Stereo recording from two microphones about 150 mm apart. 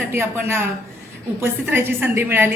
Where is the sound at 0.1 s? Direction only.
15° right (ahead or behind).